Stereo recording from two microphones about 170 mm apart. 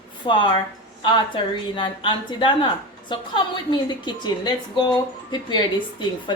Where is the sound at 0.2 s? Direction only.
30° left (ahead or behind).